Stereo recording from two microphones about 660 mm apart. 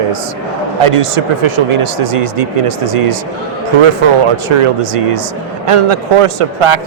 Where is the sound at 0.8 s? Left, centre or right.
Right.